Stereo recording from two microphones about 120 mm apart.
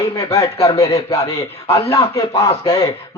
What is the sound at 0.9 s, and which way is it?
Speech, 25° left (ahead or behind).